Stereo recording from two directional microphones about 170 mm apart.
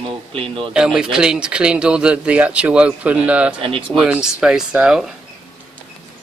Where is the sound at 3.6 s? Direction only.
30° right (ahead or behind).